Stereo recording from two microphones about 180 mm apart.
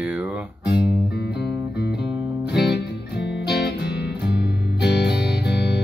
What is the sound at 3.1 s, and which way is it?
Music, 70° left (ahead or behind).